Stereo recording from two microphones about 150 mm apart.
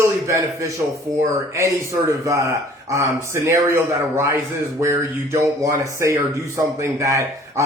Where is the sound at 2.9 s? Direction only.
20° right (ahead or behind).